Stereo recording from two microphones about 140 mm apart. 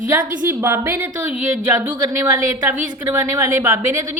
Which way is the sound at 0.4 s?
15° right (ahead or behind).